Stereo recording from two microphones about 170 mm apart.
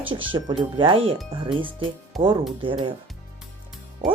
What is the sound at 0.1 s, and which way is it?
Speech, 30° right (ahead or behind).